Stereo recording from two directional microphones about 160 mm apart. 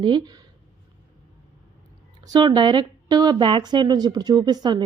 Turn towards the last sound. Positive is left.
turn(degrees=-25)  # may be behind; listen again after turning